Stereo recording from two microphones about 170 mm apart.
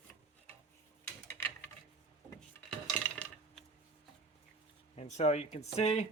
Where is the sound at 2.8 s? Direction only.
5° left (ahead or behind).